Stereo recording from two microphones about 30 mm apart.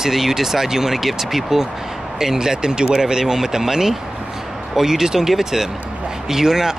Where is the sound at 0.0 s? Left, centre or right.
Centre.